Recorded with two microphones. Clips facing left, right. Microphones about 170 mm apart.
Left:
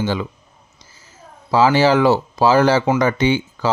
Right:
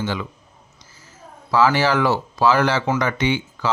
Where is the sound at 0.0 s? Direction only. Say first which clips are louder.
Left 4 dB; 30° left (ahead or behind).